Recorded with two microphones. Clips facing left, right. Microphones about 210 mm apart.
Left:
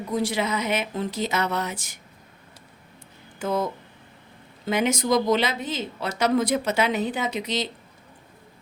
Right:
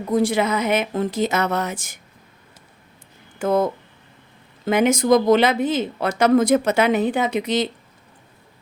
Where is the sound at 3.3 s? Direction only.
55° right (ahead or behind).